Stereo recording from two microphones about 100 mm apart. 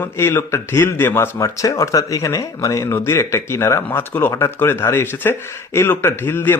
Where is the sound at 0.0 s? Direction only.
25° left (ahead or behind).